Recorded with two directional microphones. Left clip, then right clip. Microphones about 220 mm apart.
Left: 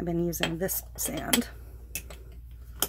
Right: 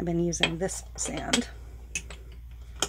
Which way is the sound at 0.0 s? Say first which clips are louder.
Right 3 dB; centre (ahead or behind).